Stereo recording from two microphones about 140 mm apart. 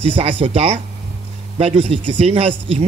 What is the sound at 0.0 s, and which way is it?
Speech, 40° right (ahead or behind).